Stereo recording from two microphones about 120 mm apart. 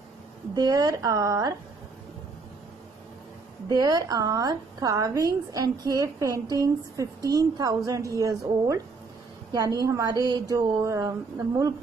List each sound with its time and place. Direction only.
0.6 s a woman's voice: 30° right (ahead or behind)
3.6 s a woman's voice: 30° right (ahead or behind)